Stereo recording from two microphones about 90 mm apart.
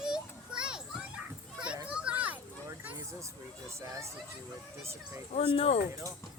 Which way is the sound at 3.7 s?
35° right (ahead or behind).